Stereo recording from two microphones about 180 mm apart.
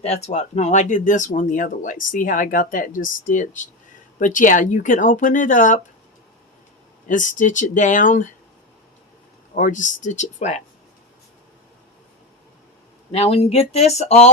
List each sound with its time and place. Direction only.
0.0 s speech: 35° left (ahead or behind)
7.1 s speech: 45° left (ahead or behind)
9.6 s speech: 45° left (ahead or behind)
13.1 s speech: 35° left (ahead or behind)